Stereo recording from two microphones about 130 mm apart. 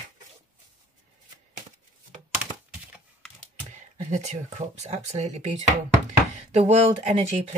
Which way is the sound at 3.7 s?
65° right (ahead or behind).